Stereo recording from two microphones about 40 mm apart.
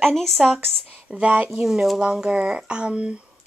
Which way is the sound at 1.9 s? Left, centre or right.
Centre.